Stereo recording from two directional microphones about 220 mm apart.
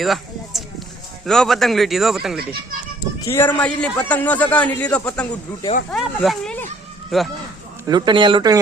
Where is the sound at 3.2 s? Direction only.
10° left (ahead or behind).